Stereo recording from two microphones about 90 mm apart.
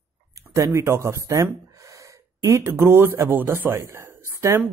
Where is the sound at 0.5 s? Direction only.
35° right (ahead or behind).